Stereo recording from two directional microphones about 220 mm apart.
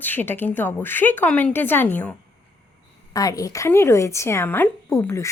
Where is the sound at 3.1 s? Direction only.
15° left (ahead or behind).